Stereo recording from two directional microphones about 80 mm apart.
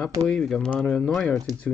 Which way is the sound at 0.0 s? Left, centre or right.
Centre.